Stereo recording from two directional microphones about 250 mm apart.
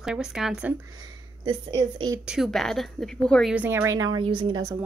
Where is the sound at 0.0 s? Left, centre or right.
Centre.